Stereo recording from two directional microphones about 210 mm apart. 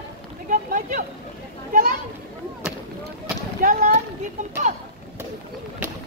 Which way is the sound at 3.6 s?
40° right (ahead or behind).